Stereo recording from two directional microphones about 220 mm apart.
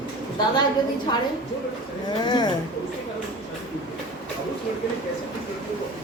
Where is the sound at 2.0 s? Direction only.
20° left (ahead or behind).